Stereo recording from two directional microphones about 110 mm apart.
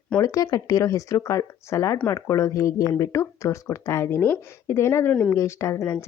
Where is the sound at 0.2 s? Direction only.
30° left (ahead or behind).